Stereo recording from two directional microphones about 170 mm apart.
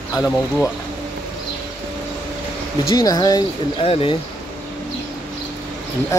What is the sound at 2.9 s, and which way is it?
Speech, 25° left (ahead or behind).